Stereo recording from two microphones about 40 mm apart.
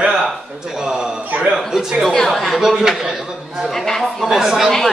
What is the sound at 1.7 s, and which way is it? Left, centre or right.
Speech, centre.